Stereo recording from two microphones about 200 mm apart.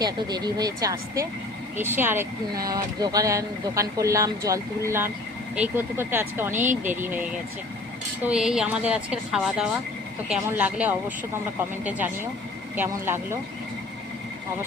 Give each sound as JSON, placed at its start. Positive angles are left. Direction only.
{"t": 0.0, "sound": "a woman's voice", "side_deg": -20}